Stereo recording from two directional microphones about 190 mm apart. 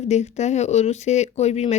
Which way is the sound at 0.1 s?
35° left (ahead or behind).